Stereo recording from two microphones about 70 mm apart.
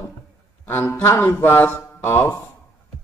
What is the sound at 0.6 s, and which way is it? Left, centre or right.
Speech, left.